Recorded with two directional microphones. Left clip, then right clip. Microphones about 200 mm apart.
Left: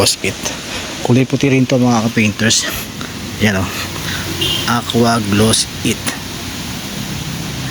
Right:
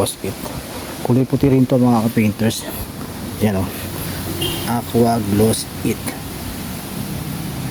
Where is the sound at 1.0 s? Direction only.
Centre (ahead or behind).